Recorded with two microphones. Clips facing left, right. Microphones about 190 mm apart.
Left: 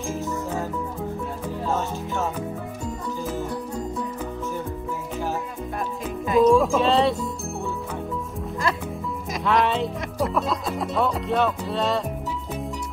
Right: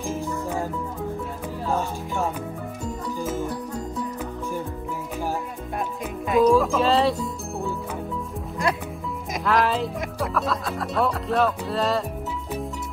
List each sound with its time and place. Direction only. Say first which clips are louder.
0.2 s music: even; 15° right (ahead or behind)
1.7 s music: right 1 dB; 15° right (ahead or behind)
6.2 s music: left 1 dB; centre (ahead or behind)
9.3 s speech: even; centre (ahead or behind)